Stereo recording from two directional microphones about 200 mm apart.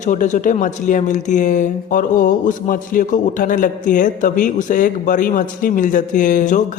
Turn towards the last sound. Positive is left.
turn(degrees=40)  # may be behind; listen again after turning